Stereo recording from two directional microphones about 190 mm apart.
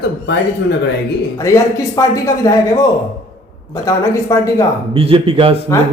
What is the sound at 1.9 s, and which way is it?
A man's voice, 15° left (ahead or behind).